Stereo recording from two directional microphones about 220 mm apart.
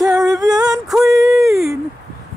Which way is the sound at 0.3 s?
15° right (ahead or behind).